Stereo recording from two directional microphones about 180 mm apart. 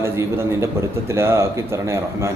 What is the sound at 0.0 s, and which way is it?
A man's voice, 15° right (ahead or behind).